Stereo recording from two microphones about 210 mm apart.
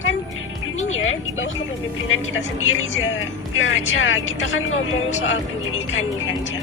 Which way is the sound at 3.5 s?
70° left (ahead or behind).